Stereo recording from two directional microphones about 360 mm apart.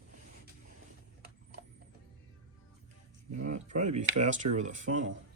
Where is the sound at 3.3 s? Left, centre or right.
Right.